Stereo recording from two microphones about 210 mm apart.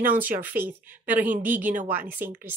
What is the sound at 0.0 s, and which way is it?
Speech, 10° right (ahead or behind).